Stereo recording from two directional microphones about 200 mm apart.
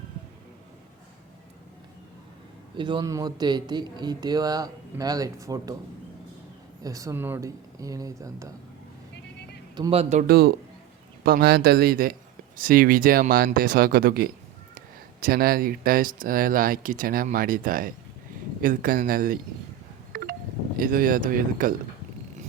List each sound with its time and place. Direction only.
2.7 s a man's voice: 25° right (ahead or behind)
6.8 s speech: 15° right (ahead or behind)
9.7 s speech: 25° right (ahead or behind)
10.2 s speech: 55° right (ahead or behind)
20.1 s wind chime: 45° right (ahead or behind)
20.7 s speech: 45° right (ahead or behind)